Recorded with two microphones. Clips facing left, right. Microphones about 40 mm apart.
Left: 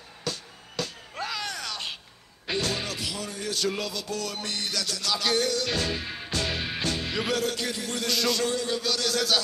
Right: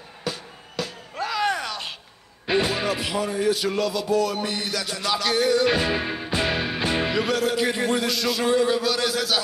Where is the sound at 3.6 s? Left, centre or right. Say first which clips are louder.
Right 5 dB; centre.